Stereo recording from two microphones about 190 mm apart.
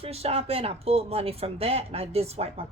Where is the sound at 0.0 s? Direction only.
30° right (ahead or behind).